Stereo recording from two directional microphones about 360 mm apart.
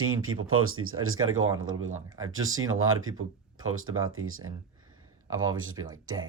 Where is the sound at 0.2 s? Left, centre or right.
Right.